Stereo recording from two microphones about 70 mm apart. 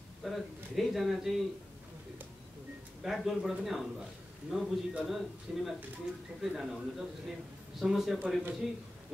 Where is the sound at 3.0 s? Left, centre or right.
Centre.